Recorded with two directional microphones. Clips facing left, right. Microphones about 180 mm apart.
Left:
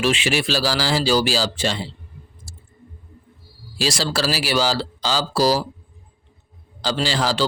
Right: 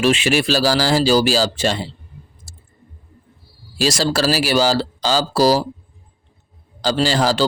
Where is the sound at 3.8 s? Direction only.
45° right (ahead or behind).